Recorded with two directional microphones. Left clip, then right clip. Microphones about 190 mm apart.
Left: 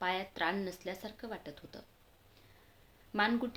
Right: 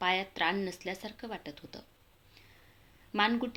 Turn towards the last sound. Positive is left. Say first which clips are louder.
# right 3 dB
turn(degrees=-15)  # may be behind; listen again after turning